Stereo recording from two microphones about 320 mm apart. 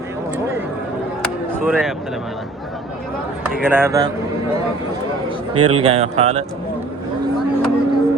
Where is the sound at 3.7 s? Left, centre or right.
Centre.